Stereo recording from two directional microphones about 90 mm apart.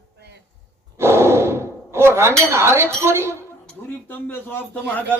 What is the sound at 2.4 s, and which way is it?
Speech, 30° right (ahead or behind).